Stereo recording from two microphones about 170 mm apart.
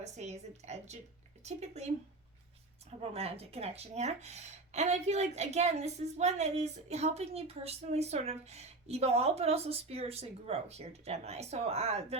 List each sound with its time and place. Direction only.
0.0 s speech: 40° right (ahead or behind)
3.0 s speech: 35° right (ahead or behind)